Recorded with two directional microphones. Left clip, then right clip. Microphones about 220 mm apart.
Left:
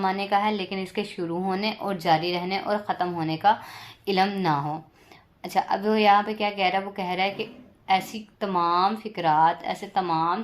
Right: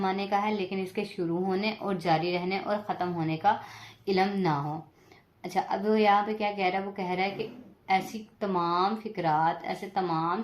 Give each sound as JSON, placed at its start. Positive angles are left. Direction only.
{"t": 0.0, "sound": "speech", "side_deg": 35}